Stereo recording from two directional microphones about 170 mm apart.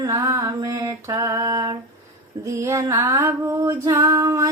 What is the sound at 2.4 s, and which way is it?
Female singing, 20° right (ahead or behind).